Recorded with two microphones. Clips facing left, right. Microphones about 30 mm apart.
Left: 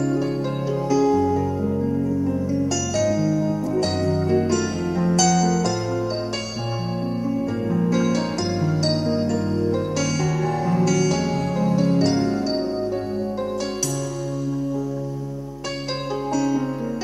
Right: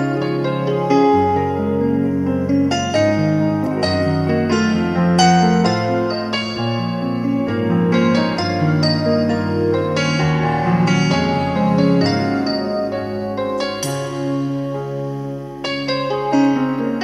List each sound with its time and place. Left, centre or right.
0.8 s music: right
7.7 s music: right
16.3 s music: right